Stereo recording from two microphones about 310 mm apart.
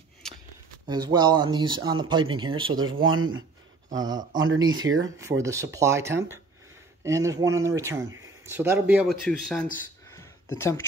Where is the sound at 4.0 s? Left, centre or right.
Centre.